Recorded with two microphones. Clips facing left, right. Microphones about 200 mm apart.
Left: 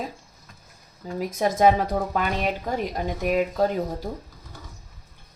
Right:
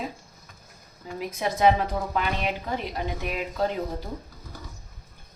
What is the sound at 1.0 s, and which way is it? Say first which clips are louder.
A woman's voice: left 5 dB; 40° left (ahead or behind).